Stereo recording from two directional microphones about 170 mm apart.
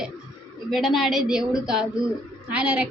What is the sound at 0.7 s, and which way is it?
A woman's voice, centre (ahead or behind).